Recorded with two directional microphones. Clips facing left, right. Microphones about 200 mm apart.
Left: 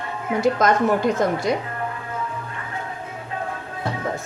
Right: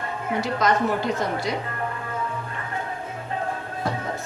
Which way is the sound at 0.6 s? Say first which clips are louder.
Left 1 dB; 45° left (ahead or behind).